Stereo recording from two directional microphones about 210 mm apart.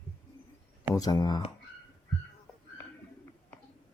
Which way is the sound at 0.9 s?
15° left (ahead or behind).